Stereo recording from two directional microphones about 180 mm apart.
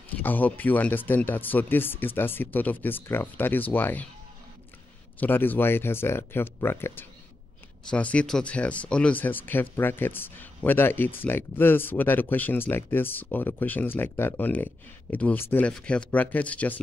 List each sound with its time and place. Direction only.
0.2 s speech: 10° left (ahead or behind)
5.2 s speech: 10° left (ahead or behind)